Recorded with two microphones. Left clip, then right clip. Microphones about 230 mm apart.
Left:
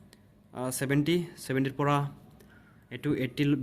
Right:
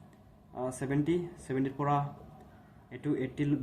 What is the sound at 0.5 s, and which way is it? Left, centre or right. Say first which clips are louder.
Speech: left 3 dB; left.